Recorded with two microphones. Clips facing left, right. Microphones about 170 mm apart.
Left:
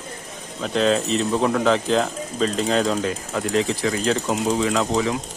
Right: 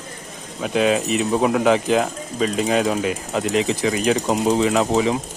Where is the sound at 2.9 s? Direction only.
20° right (ahead or behind).